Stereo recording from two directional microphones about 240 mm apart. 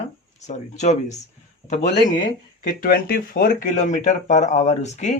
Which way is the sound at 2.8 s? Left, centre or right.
Left.